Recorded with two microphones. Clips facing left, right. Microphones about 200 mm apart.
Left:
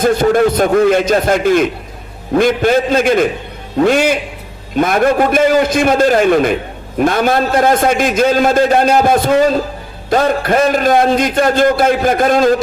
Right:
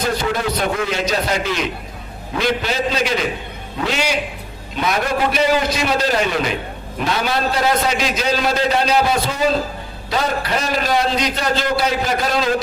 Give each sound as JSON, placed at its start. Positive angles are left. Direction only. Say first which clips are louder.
{"t": 0.0, "sound": "a man's voice", "louder": "left 10 dB", "side_deg": 50}